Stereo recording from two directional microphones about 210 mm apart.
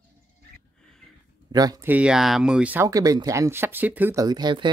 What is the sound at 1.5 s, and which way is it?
Speech, 20° right (ahead or behind).